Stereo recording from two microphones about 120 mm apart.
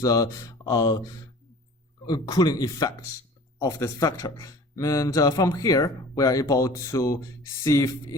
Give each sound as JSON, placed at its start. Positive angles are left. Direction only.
{"t": 0.0, "sound": "speech", "side_deg": 30}